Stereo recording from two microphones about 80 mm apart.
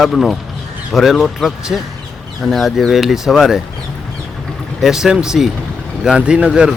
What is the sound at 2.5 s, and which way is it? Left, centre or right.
Speech, centre.